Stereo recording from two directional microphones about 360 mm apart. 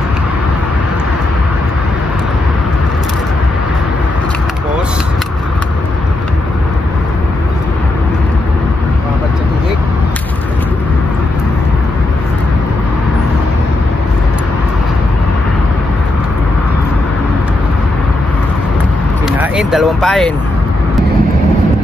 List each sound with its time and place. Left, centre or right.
19.3 s vehicle: centre